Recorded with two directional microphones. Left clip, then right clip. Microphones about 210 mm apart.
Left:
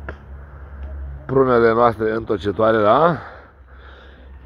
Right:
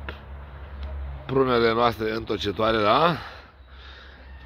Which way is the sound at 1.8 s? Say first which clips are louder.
Left 6 dB; 30° right (ahead or behind).